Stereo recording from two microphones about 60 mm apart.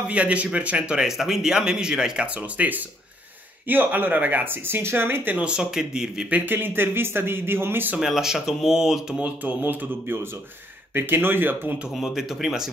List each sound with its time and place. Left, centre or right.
0.1 s speech: right
1.0 s speech: centre
2.5 s speech: right
5.4 s speech: centre
6.3 s speech: right
8.0 s speech: centre
9.1 s speech: right
11.0 s speech: right
12.0 s speech: centre